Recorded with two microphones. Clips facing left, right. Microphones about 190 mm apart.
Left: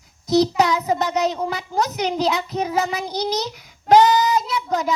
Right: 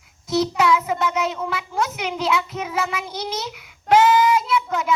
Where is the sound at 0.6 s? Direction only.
40° left (ahead or behind).